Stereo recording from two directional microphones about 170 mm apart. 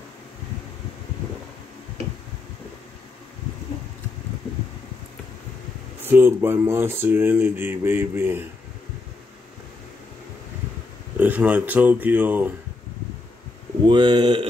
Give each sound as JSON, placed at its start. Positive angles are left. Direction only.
{"t": 6.0, "sound": "speech", "side_deg": -15}
{"t": 11.1, "sound": "speech", "side_deg": -10}
{"t": 13.8, "sound": "speech", "side_deg": -30}